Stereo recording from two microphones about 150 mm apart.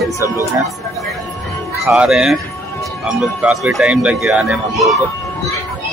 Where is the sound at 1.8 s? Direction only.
5° right (ahead or behind).